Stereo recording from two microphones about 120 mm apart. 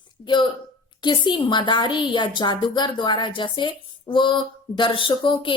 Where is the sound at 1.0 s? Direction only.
40° left (ahead or behind).